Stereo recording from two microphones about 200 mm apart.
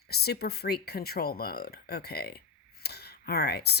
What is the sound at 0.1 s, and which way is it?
Speech, 50° left (ahead or behind).